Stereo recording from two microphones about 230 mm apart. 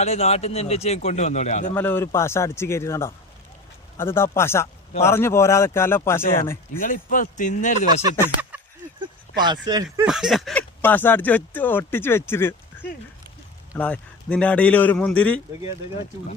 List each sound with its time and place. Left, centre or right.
0.0 s a man's voice: left
1.7 s speech: centre
6.7 s speech: left
8.5 s a sound: centre
9.0 s speech: centre
10.1 s a man's voice: centre